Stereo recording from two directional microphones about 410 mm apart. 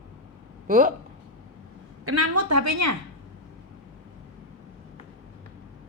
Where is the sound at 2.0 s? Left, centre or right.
Right.